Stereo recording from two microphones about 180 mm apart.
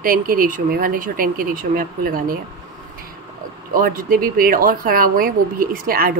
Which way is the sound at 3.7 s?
50° right (ahead or behind).